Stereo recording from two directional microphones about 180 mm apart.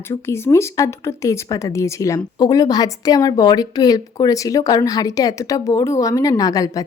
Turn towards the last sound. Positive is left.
turn(degrees=20)  # may be behind; listen again after turning